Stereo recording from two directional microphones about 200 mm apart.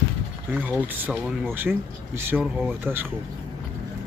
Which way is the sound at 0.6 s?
10° right (ahead or behind).